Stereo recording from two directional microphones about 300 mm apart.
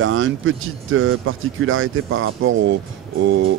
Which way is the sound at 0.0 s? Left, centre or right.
Right.